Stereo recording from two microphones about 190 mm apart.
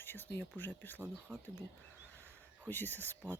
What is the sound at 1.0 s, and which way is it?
Speech, 10° right (ahead or behind).